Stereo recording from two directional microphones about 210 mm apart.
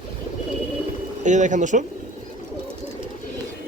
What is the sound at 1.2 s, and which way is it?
Speech, 35° right (ahead or behind).